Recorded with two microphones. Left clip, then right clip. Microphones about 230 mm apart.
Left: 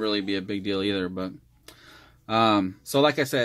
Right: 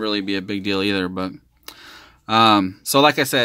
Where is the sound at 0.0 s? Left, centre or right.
Centre.